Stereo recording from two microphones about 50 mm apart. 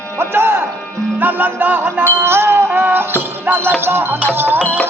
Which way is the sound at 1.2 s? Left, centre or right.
Right.